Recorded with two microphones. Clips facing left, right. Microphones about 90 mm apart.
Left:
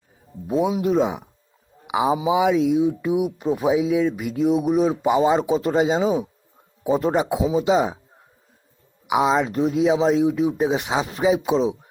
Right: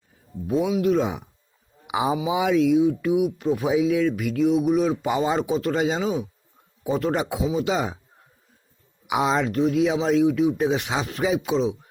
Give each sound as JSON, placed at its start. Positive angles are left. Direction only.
{"t": 0.8, "sound": "a man's voice", "side_deg": 20}
{"t": 3.0, "sound": "speech", "side_deg": 25}
{"t": 5.0, "sound": "speech", "side_deg": 10}
{"t": 9.0, "sound": "speech", "side_deg": 5}
{"t": 9.4, "sound": "speech", "side_deg": 20}